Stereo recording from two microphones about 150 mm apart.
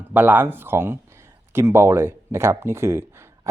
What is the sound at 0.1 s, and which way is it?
Speech, 10° right (ahead or behind).